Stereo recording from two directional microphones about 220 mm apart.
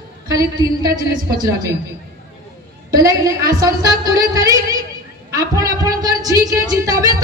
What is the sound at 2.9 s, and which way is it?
A man's voice, 15° right (ahead or behind).